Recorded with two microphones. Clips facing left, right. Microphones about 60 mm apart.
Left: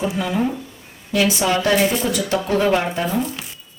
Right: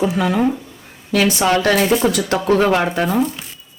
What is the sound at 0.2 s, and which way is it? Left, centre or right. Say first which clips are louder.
Speech: right 4 dB; right.